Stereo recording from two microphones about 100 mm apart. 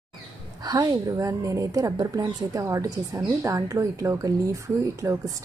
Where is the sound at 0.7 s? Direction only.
40° right (ahead or behind).